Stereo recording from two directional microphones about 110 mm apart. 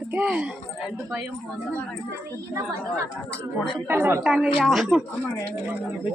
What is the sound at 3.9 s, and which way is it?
A woman's voice, 20° right (ahead or behind).